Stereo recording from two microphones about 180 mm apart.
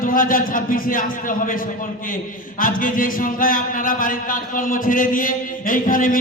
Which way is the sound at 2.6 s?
50° left (ahead or behind).